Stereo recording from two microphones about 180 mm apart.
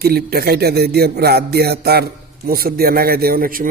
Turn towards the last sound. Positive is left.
turn(degrees=-55)  # may be behind; listen again after turning